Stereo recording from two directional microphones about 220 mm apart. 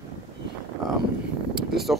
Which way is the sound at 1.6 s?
Centre (ahead or behind).